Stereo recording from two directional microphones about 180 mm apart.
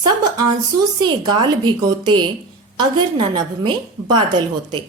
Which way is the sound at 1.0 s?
25° right (ahead or behind).